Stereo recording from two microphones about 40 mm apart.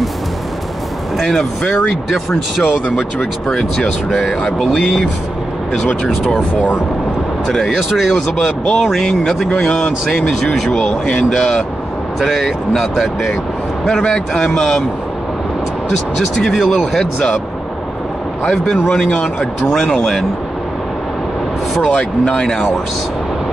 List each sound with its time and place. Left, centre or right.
1.1 s a man's voice: centre
2.0 s a man's voice: centre
6.5 s speech: left
7.5 s a man's voice: centre
10.4 s a man's voice: centre
13.8 s a man's voice: centre
16.6 s a man's voice: centre
18.5 s a man's voice: centre
22.2 s speech: centre